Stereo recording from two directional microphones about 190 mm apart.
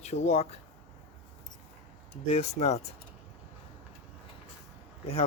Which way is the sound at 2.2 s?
35° left (ahead or behind).